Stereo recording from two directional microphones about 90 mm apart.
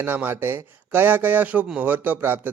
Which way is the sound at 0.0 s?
25° right (ahead or behind).